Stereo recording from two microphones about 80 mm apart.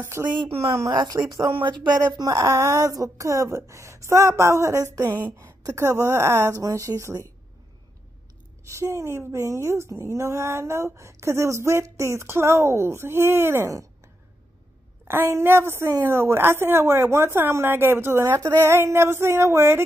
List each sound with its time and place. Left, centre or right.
0.2 s a woman's voice: centre
0.8 s speech: right
1.5 s speech: right
2.0 s a woman's voice: right
6.6 s a woman's voice: right
8.6 s a woman's voice: right
15.0 s a woman's voice: right